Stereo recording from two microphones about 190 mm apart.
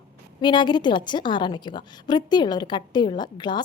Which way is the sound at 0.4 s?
25° left (ahead or behind).